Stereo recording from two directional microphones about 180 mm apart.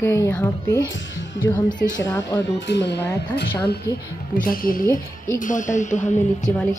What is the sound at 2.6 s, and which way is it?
Speech, 75° left (ahead or behind).